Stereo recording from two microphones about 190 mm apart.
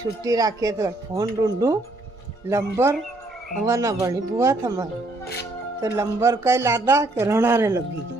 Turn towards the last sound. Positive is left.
turn(degrees=-15)  # may be behind; listen again after turning